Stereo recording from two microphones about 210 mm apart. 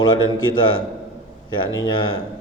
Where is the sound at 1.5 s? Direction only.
20° left (ahead or behind).